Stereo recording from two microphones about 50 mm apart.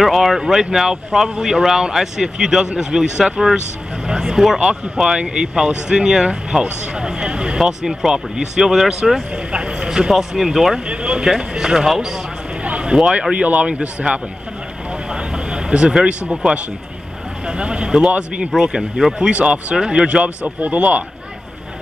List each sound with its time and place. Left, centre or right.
0.0 s speech: centre
9.3 s speech: centre
10.9 s speech: right
11.2 s speech: centre
12.6 s a sound: right
13.3 s speech: right
15.0 s vehicle: centre
17.5 s speech: centre
18.0 s speech: right
18.5 s speech: centre
19.2 s speech: right
20.6 s speech: right